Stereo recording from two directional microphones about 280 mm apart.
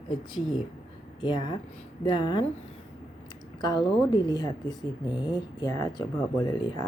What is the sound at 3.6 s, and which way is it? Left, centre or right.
A woman's voice, centre.